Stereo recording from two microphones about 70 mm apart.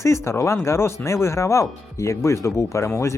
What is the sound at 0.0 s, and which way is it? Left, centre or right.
Speech, left.